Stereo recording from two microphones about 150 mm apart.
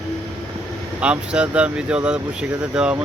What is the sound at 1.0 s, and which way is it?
Speech, 5° right (ahead or behind).